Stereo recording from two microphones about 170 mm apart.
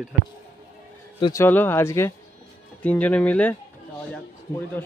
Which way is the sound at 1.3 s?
15° left (ahead or behind).